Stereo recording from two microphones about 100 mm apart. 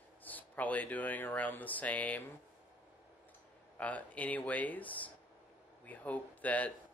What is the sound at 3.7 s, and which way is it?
A man's voice, 15° left (ahead or behind).